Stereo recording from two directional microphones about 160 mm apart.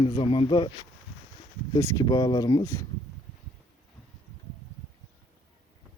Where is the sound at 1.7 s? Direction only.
25° left (ahead or behind).